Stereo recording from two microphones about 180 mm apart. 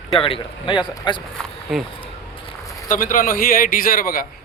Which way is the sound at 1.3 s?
Centre (ahead or behind).